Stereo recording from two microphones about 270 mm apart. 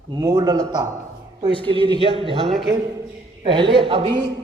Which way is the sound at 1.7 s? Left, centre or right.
Centre.